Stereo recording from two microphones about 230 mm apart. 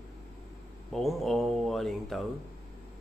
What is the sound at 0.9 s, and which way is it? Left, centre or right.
Speech, centre.